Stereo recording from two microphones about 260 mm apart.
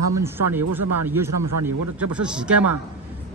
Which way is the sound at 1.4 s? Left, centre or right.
Right.